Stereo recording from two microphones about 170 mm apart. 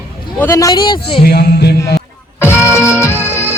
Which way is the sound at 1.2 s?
65° left (ahead or behind).